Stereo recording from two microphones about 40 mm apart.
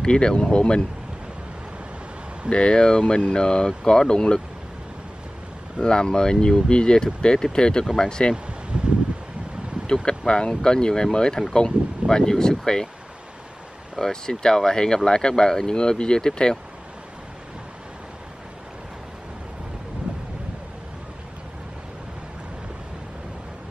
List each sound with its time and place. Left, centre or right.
0.0 s speech: left
2.5 s speech: left
5.8 s speech: left
8.7 s a sound: right
10.0 s speech: left
14.0 s speech: centre